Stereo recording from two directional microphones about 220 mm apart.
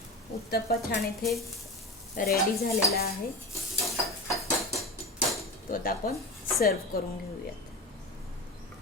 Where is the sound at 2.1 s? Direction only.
45° left (ahead or behind).